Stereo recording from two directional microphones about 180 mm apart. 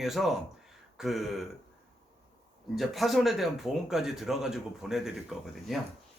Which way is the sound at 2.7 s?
Centre (ahead or behind).